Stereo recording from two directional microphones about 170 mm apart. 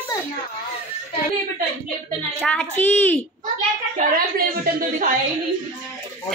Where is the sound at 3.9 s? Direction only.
60° right (ahead or behind).